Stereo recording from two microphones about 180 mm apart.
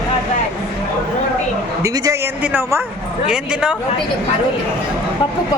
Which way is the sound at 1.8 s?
15° right (ahead or behind).